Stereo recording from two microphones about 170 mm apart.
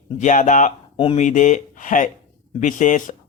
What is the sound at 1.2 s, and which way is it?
Speech, 45° left (ahead or behind).